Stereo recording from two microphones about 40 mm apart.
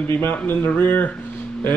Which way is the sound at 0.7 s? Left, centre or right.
Left.